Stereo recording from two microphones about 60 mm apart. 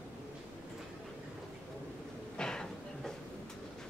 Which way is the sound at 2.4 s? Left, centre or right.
Centre.